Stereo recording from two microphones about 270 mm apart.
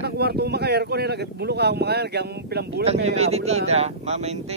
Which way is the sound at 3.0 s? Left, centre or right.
Right.